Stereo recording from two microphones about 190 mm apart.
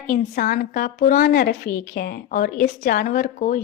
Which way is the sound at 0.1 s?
45° left (ahead or behind).